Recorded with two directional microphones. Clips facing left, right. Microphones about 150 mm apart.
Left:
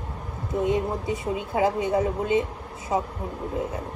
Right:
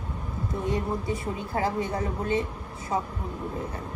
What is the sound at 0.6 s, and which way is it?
A woman's voice, 20° left (ahead or behind).